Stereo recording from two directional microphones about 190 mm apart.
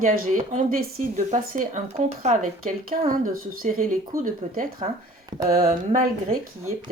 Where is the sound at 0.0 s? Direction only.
45° right (ahead or behind).